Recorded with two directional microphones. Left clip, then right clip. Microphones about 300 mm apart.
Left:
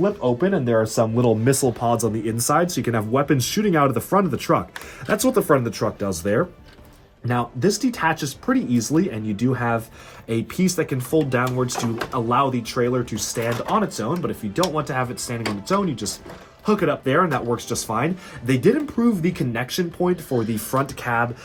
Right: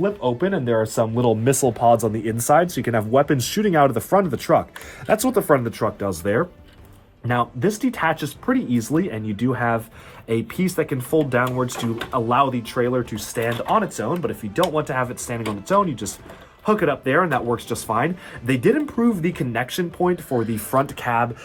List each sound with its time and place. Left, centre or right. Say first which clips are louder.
0.0 s speech: left 1 dB; centre